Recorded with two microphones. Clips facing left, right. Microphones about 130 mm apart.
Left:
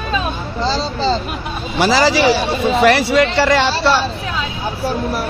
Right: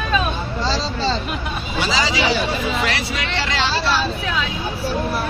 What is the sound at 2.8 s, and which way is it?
Speech, 65° left (ahead or behind).